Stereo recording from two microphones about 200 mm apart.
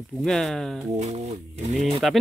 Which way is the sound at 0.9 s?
35° right (ahead or behind).